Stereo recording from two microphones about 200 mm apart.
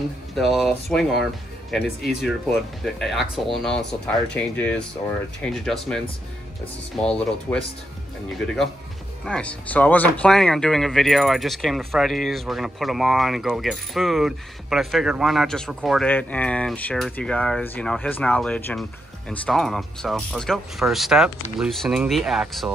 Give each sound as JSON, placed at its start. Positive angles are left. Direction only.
{"t": 0.3, "sound": "speech", "side_deg": 0}
{"t": 9.2, "sound": "speech", "side_deg": 5}